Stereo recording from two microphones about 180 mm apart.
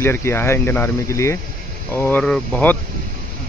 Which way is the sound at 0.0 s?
15° left (ahead or behind).